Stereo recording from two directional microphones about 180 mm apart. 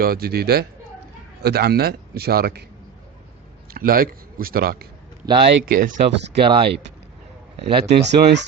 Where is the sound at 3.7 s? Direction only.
55° right (ahead or behind).